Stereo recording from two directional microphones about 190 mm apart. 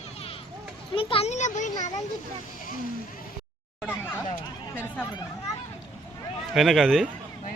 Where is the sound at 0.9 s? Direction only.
30° left (ahead or behind).